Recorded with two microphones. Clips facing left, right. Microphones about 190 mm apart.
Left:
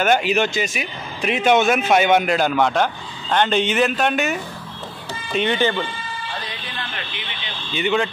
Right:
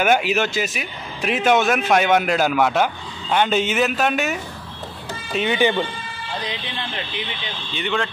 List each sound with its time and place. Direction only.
0.0 s a man's voice: 5° right (ahead or behind)
5.6 s speech: 15° right (ahead or behind)
7.7 s speech: 5° left (ahead or behind)